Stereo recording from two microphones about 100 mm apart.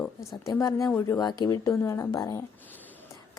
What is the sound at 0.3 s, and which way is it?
A woman's voice, 30° left (ahead or behind).